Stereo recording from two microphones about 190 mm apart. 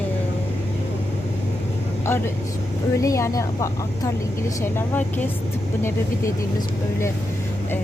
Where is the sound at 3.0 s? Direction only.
15° left (ahead or behind).